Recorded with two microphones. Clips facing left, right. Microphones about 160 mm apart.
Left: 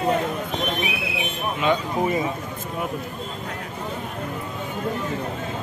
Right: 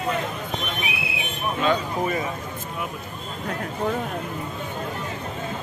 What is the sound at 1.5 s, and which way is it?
Speech, 20° left (ahead or behind).